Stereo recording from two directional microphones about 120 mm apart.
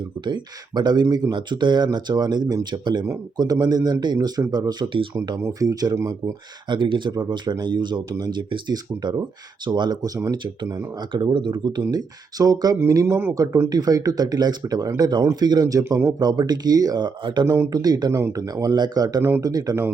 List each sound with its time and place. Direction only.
0.3 s speech: 40° right (ahead or behind)
5.4 s speech: 30° right (ahead or behind)
6.7 s speech: 45° right (ahead or behind); by 16.1 s 20° right (ahead or behind)
16.1 s speech: 35° right (ahead or behind)
17.4 s speech: 25° right (ahead or behind)